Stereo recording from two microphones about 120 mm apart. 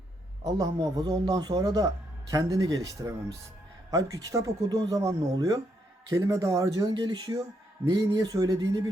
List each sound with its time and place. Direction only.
0.4 s a man's voice: 30° right (ahead or behind)